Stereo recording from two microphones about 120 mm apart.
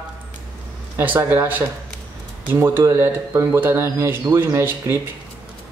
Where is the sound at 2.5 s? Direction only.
25° right (ahead or behind).